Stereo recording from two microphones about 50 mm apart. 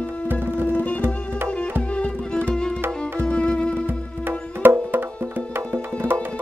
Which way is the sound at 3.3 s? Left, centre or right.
Left.